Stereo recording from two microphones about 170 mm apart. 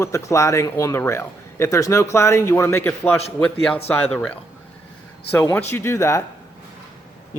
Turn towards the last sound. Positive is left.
turn(degrees=15)  # may be behind; listen again after turning